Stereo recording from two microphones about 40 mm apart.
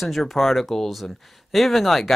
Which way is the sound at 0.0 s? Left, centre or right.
Centre.